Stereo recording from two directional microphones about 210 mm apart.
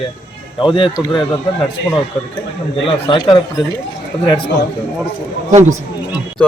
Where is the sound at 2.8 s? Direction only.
25° left (ahead or behind).